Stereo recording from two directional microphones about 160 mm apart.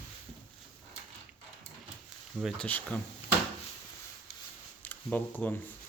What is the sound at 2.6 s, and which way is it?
Speech, 10° left (ahead or behind).